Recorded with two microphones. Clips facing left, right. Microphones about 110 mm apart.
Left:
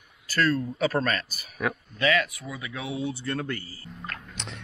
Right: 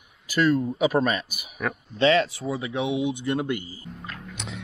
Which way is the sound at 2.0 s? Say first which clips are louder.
Right 6 dB; 30° right (ahead or behind).